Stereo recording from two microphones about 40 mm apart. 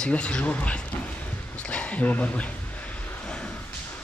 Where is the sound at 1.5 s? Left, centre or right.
Left.